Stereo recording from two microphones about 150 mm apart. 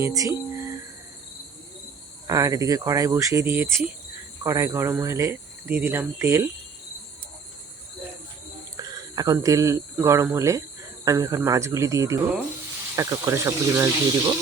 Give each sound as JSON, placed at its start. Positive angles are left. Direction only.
{"t": 0.0, "sound": "speech", "side_deg": -20}
{"t": 0.5, "sound": "a sound", "side_deg": -15}
{"t": 2.2, "sound": "speech", "side_deg": -20}
{"t": 8.7, "sound": "speech", "side_deg": -25}